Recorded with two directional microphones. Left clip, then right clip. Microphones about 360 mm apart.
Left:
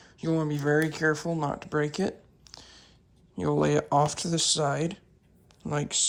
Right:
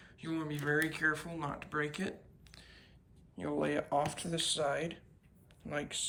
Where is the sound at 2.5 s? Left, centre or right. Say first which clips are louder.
Left 9 dB; centre.